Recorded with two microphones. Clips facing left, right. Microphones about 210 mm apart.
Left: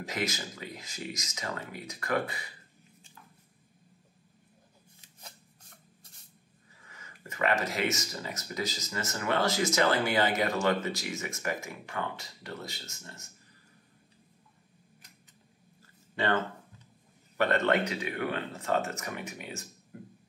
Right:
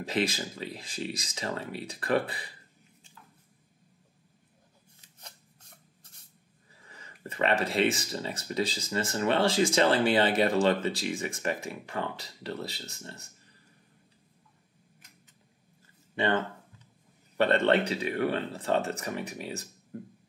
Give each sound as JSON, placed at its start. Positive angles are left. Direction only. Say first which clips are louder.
{"t": 0.0, "sound": "speech", "louder": "right 5 dB", "side_deg": -30}
{"t": 6.9, "sound": "speech", "louder": "right 4 dB", "side_deg": -35}
{"t": 16.2, "sound": "speech", "louder": "right 2 dB", "side_deg": -25}
{"t": 17.4, "sound": "speech", "louder": "right 3 dB", "side_deg": -30}